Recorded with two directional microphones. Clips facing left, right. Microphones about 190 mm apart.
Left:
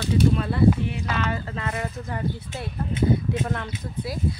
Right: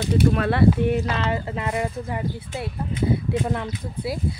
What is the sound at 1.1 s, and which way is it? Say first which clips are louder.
Speech: right 2 dB; 20° right (ahead or behind).